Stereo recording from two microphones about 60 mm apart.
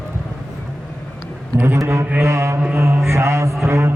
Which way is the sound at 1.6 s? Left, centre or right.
Right.